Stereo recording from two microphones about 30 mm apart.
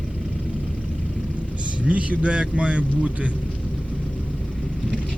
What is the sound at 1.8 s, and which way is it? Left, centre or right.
A man's voice, right.